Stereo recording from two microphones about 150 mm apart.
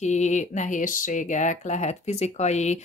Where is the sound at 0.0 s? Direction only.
50° left (ahead or behind).